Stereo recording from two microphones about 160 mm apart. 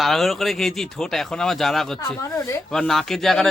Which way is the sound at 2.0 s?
20° left (ahead or behind).